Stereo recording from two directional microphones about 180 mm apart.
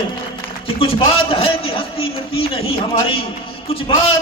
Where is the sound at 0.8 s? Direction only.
30° left (ahead or behind).